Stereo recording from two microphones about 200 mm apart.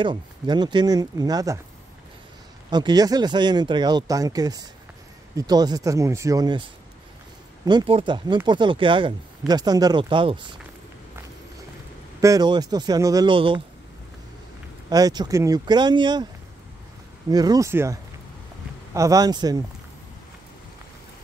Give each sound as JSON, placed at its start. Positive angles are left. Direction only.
{"t": 0.0, "sound": "speech", "side_deg": -20}
{"t": 2.7, "sound": "speech", "side_deg": -20}
{"t": 7.6, "sound": "speech", "side_deg": -25}
{"t": 12.2, "sound": "speech", "side_deg": -20}
{"t": 14.9, "sound": "speech", "side_deg": -20}
{"t": 17.3, "sound": "speech", "side_deg": -20}
{"t": 18.9, "sound": "speech", "side_deg": -15}